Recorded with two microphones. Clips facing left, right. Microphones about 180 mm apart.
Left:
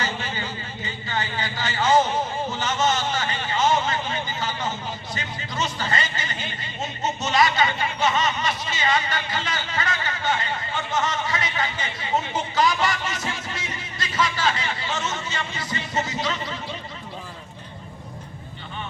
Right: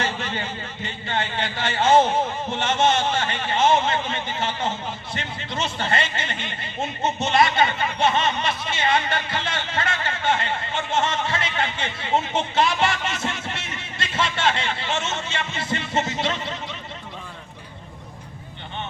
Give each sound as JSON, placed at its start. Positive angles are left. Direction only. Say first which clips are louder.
{"t": 1.1, "sound": "a man's voice", "louder": "right 2 dB", "side_deg": -25}